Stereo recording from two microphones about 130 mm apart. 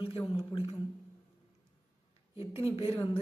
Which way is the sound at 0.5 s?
45° left (ahead or behind).